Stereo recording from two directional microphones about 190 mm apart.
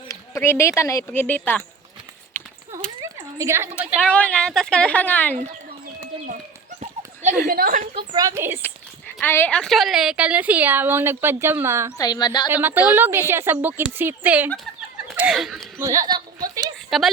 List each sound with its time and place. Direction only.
0.1 s speech: 15° left (ahead or behind)
3.0 s a sound: 15° right (ahead or behind)
4.1 s a woman's voice: 5° left (ahead or behind)
6.7 s horse: 40° right (ahead or behind)
7.4 s a woman's voice: 50° right (ahead or behind)
7.9 s a woman's voice: 20° right (ahead or behind)
9.2 s a woman's voice: 10° left (ahead or behind); by 11.9 s 15° right (ahead or behind)
11.9 s speech: 20° left (ahead or behind)
12.5 s a woman's voice: 10° right (ahead or behind)
15.1 s a sound: 5° right (ahead or behind)
15.8 s a woman's voice: 15° right (ahead or behind)
16.9 s a woman's voice: centre (ahead or behind)